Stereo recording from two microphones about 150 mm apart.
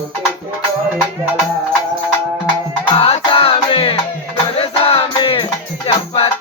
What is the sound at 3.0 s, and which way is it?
Music, 40° left (ahead or behind).